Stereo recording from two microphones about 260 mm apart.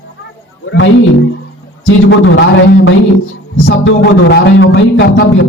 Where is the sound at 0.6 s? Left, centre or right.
Left.